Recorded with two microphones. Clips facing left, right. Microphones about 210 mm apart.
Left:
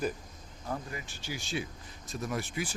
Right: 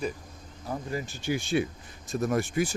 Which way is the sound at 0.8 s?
40° right (ahead or behind).